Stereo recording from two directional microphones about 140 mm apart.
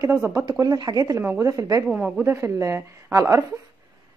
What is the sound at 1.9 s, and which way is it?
A woman's voice, 10° right (ahead or behind).